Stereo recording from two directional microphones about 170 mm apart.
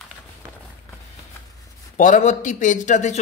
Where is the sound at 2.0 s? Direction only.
45° left (ahead or behind).